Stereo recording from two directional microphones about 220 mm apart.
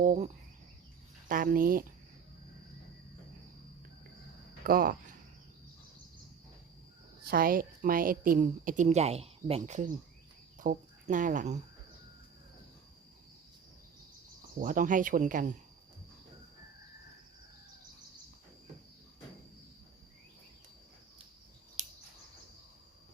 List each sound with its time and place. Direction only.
0.0 s a woman's voice: 35° right (ahead or behind)
1.3 s a woman's voice: 40° right (ahead or behind)
4.6 s speech: 40° right (ahead or behind)
7.3 s a woman's voice: 40° right (ahead or behind)
14.6 s a woman's voice: 35° right (ahead or behind)
21.8 s scissors: 30° right (ahead or behind)